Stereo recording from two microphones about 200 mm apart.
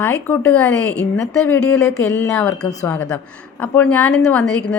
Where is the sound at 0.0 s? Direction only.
10° left (ahead or behind).